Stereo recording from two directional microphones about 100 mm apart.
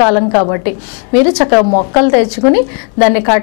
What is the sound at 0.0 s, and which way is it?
A woman's voice, 15° left (ahead or behind).